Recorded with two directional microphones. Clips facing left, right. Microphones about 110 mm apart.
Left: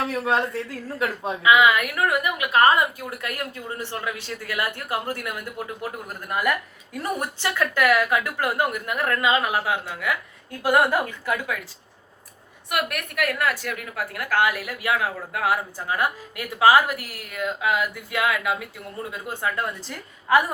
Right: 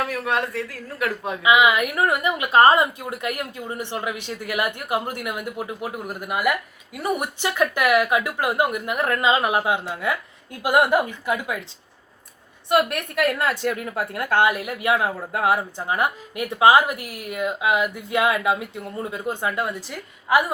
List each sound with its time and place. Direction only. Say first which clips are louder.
0.1 s speech: left 1 dB; 25° left (ahead or behind)
1.4 s a woman's voice: even; 20° right (ahead or behind)
12.6 s a woman's voice: right 7 dB; 30° right (ahead or behind); by 20.4 s 5° right (ahead or behind)